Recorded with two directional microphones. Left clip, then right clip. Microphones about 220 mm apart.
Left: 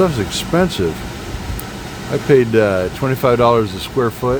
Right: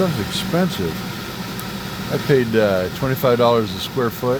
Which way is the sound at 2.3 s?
15° left (ahead or behind).